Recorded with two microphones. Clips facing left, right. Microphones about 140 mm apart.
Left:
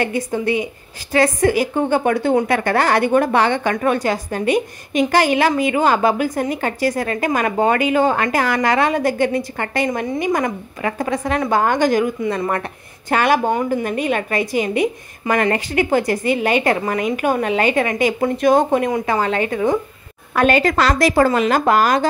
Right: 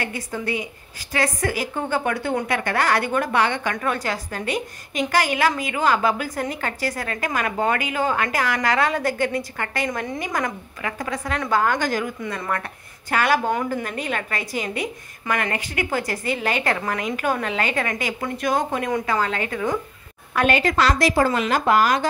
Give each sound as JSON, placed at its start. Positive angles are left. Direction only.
{"t": 0.0, "sound": "a woman's voice", "side_deg": 20}
{"t": 15.3, "sound": "a woman's voice", "side_deg": 35}
{"t": 20.3, "sound": "a woman's voice", "side_deg": 40}